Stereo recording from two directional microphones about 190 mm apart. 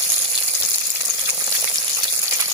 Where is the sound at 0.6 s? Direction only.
15° right (ahead or behind).